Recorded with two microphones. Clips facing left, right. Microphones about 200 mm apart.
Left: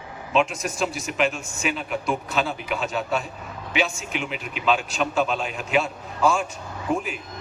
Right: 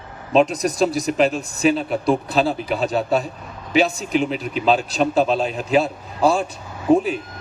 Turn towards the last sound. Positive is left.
turn(degrees=-35)  # may be behind; listen again after turning